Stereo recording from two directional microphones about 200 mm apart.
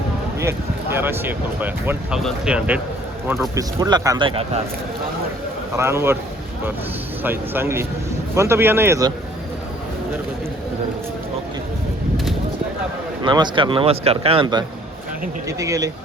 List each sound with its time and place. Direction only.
0.3 s speech: 10° right (ahead or behind)
3.5 s speech: 15° right (ahead or behind)
5.7 s speech: 15° right (ahead or behind)
7.3 s speech: 10° right (ahead or behind)
13.2 s speech: 20° right (ahead or behind)